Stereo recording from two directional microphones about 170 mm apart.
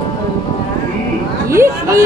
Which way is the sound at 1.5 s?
15° right (ahead or behind).